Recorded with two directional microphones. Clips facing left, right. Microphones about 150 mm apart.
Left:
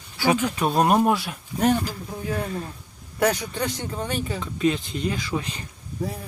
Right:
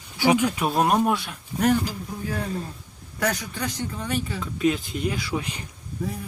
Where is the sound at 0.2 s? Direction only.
15° right (ahead or behind); by 1.4 s 5° left (ahead or behind).